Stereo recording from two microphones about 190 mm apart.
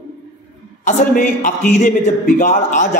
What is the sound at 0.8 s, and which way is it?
A man's voice, 40° left (ahead or behind).